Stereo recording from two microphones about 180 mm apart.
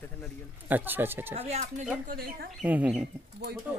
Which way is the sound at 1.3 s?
35° right (ahead or behind).